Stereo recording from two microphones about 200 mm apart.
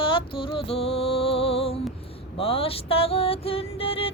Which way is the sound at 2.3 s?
30° left (ahead or behind).